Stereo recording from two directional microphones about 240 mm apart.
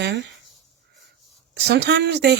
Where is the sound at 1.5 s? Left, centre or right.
Right.